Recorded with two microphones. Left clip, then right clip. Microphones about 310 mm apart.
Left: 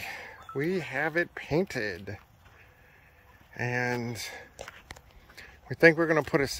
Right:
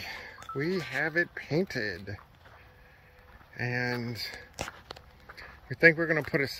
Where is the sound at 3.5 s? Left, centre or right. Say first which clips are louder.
Left 2 dB; centre.